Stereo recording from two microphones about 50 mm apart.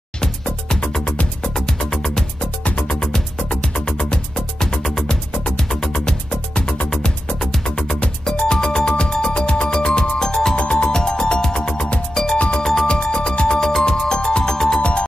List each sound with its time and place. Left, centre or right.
1.4 s music: centre
2.6 s music: left
3.0 s music: centre
10.5 s music: left
14.8 s music: left